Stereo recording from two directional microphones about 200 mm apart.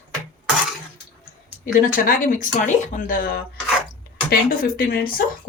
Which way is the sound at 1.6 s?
45° left (ahead or behind).